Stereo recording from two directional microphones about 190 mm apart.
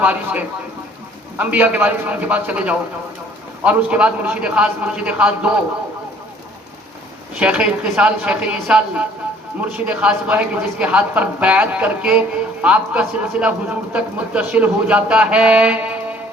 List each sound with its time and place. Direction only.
0.0 s a man's voice: 5° right (ahead or behind)
7.3 s a man's voice: 5° right (ahead or behind)